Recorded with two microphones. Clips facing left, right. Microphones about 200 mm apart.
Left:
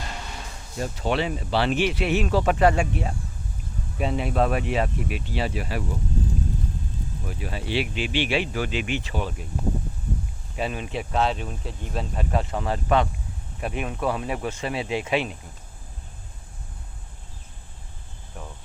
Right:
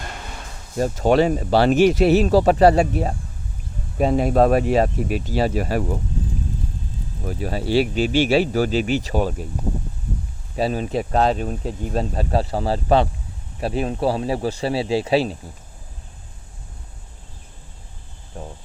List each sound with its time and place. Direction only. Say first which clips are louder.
0.8 s speech: right 9 dB; 45° right (ahead or behind)
7.3 s speech: right 8 dB; 40° right (ahead or behind)
10.6 s speech: right 7 dB; 35° right (ahead or behind)
18.3 s a sound: right 5 dB; 30° right (ahead or behind)